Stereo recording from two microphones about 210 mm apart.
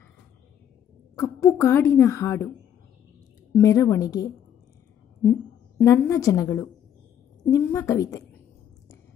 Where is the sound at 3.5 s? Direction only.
15° left (ahead or behind).